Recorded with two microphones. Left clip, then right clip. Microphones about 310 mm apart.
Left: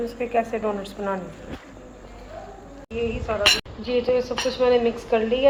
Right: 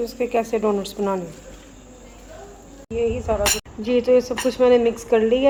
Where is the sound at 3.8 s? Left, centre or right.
Right.